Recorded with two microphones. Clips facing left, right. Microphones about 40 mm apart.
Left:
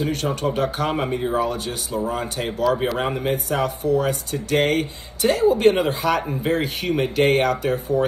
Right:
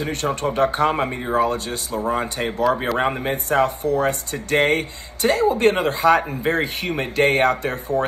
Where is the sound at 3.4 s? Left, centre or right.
Right.